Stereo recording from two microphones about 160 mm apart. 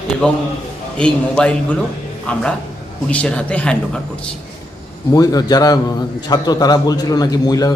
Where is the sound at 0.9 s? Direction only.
5° left (ahead or behind).